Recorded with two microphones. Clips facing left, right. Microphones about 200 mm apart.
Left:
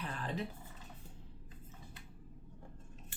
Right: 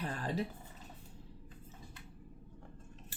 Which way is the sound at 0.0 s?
40° right (ahead or behind).